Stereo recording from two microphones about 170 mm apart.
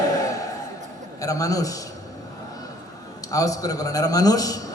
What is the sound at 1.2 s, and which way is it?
Speech, 20° left (ahead or behind).